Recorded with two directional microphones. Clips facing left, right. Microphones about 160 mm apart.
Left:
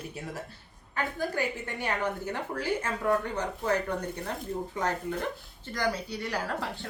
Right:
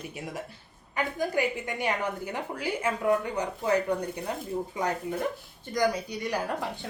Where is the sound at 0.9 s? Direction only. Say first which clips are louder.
Right 3 dB; 15° right (ahead or behind).